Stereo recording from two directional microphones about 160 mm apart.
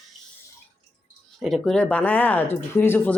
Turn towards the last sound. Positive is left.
turn(degrees=15)  # may be behind; listen again after turning